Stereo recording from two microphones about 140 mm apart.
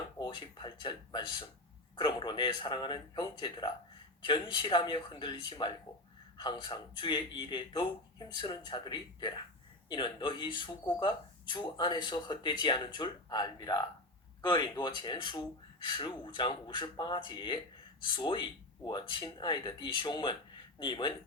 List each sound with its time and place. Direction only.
0.2 s speech: 35° left (ahead or behind)